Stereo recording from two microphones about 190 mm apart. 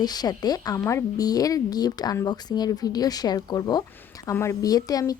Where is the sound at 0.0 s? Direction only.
20° left (ahead or behind).